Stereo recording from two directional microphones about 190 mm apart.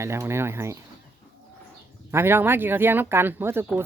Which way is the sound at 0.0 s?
15° right (ahead or behind).